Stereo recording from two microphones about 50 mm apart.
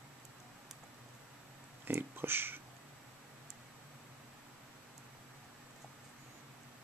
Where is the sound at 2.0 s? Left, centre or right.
Right.